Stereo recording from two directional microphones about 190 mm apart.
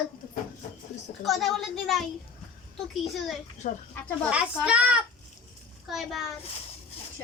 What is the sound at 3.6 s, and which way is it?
Speech, 35° left (ahead or behind).